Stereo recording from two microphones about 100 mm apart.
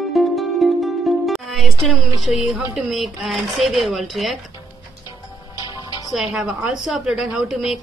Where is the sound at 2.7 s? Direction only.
Centre (ahead or behind).